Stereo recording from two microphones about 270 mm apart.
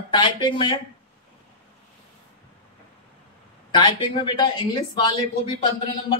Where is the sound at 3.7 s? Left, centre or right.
Centre.